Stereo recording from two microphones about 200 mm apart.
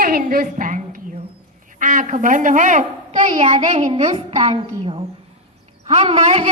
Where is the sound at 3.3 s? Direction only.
25° right (ahead or behind).